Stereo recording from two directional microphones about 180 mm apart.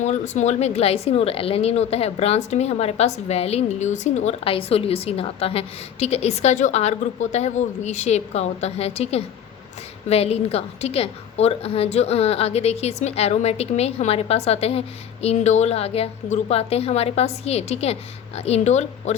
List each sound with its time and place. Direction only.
0.0 s a woman's voice: 40° left (ahead or behind)